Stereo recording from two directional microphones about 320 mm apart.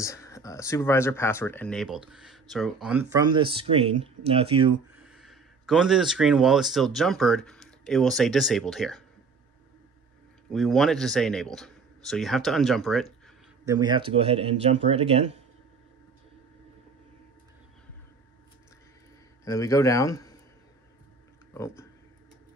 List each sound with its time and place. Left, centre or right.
0.0 s speech: centre
4.9 s speech: centre
10.5 s speech: centre
13.7 s speech: centre
19.4 s speech: centre
21.5 s speech: centre